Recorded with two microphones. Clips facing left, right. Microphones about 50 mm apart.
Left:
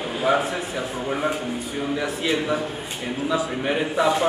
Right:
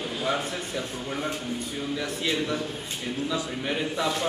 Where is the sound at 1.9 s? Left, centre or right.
Centre.